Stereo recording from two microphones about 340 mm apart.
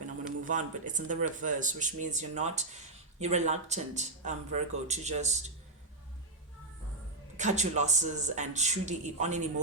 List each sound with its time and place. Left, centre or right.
0.4 s speech: right
7.3 s speech: right